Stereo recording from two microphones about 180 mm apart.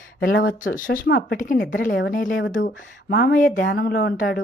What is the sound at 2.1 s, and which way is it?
Speech, 50° left (ahead or behind).